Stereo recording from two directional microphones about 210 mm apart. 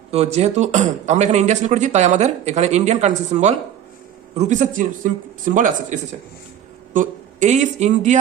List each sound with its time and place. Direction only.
0.1 s speech: 30° right (ahead or behind)